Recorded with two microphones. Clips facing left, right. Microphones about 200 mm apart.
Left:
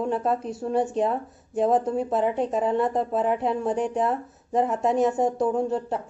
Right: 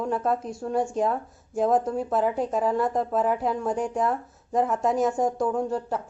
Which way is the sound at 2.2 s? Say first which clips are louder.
Left 1 dB; centre (ahead or behind).